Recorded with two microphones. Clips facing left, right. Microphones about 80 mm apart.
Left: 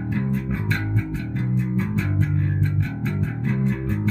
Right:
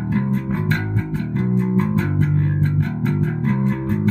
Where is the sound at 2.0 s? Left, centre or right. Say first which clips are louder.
Right 5 dB; right.